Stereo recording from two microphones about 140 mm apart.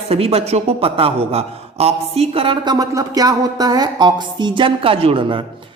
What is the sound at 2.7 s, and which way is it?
A woman's voice, 25° right (ahead or behind).